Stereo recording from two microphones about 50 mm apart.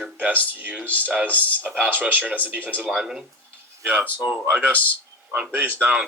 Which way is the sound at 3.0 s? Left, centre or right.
Centre.